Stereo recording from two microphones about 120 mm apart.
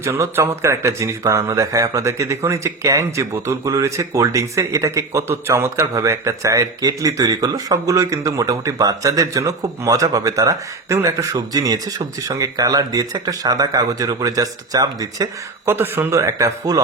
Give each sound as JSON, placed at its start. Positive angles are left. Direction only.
{"t": 0.0, "sound": "speech", "side_deg": -20}
{"t": 15.6, "sound": "speech", "side_deg": -20}